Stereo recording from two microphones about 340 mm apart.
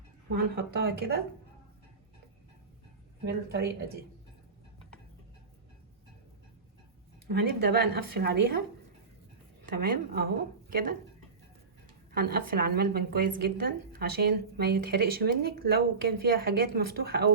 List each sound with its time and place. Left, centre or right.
0.3 s a woman's voice: right
3.2 s a woman's voice: right
7.3 s a woman's voice: right
9.7 s a woman's voice: right
12.1 s a woman's voice: right